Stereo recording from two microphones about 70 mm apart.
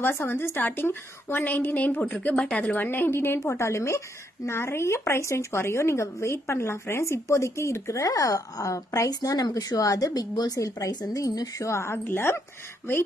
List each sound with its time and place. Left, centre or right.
0.0 s a woman's voice: left
2.1 s a woman's voice: centre; by 3.3 s left
3.3 s a woman's voice: left